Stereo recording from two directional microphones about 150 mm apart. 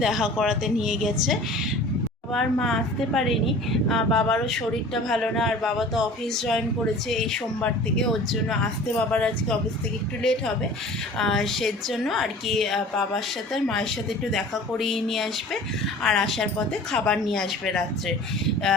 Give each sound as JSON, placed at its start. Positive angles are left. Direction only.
{"t": 0.0, "sound": "a woman's voice", "side_deg": 0}
{"t": 11.2, "sound": "a woman's voice", "side_deg": 5}